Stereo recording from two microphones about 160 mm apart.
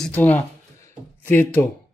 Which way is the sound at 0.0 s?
10° left (ahead or behind).